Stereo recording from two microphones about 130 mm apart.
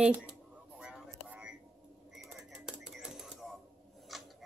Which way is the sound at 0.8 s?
10° right (ahead or behind).